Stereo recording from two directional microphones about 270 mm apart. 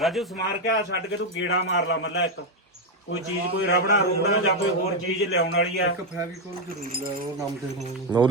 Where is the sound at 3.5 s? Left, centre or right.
Left.